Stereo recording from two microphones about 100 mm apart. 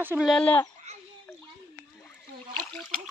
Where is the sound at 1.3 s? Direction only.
10° left (ahead or behind).